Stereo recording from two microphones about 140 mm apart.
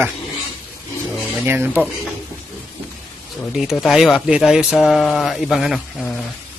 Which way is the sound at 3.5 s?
5° right (ahead or behind).